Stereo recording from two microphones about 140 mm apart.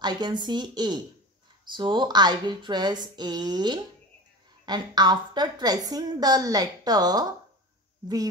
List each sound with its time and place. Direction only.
0.0 s a woman's voice: 30° right (ahead or behind)